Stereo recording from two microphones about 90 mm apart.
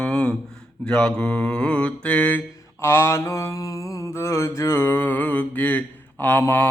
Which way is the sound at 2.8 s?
30° left (ahead or behind).